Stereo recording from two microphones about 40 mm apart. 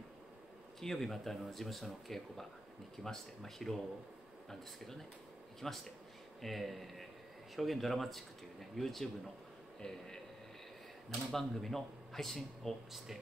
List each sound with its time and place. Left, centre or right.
0.7 s speech: centre
9.8 s speech: centre
11.3 s speech: centre